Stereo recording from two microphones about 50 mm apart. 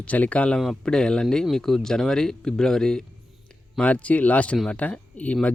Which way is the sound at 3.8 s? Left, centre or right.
Left.